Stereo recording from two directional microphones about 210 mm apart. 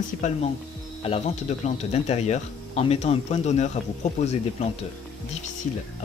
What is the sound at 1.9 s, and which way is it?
Speech, 30° left (ahead or behind).